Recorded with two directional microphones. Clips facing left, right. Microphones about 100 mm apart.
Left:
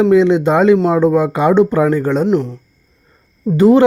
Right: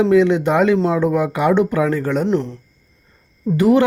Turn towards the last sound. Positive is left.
turn(degrees=25)  # may be behind; listen again after turning